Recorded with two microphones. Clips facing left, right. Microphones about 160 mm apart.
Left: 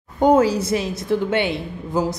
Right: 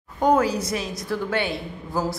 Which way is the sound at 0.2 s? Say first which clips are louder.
Left 4 dB; 25° left (ahead or behind).